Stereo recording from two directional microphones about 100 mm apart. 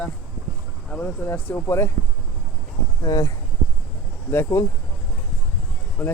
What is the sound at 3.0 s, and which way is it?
Speech, 35° left (ahead or behind).